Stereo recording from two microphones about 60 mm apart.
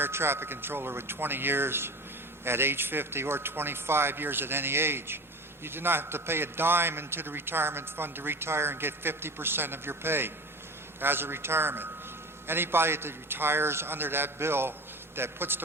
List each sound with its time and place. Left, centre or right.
0.0 s a man's voice: right